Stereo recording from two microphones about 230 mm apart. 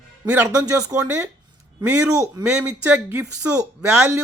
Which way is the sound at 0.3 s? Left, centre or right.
Centre.